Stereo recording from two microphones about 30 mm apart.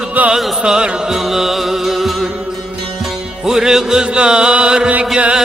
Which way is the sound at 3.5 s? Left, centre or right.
Centre.